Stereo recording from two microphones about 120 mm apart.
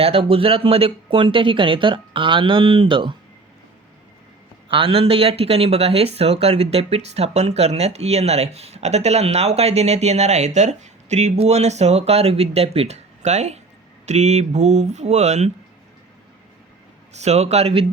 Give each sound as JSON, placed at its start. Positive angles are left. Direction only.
{"t": 0.0, "sound": "speech", "side_deg": -55}
{"t": 4.7, "sound": "speech", "side_deg": -50}
{"t": 17.2, "sound": "speech", "side_deg": -65}